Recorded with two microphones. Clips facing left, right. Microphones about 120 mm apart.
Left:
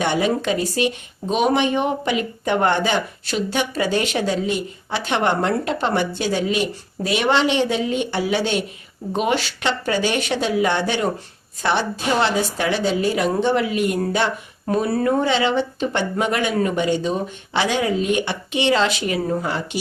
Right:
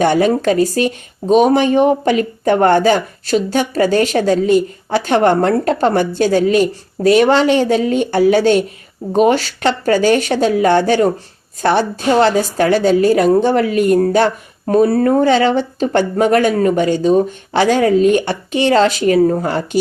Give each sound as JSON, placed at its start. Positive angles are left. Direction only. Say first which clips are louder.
{"t": 0.0, "sound": "speech", "louder": "right 7 dB", "side_deg": -45}